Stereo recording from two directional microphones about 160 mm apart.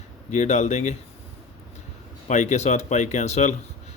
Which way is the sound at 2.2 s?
50° left (ahead or behind).